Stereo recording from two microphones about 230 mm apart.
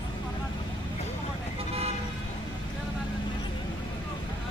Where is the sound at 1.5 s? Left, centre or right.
Right.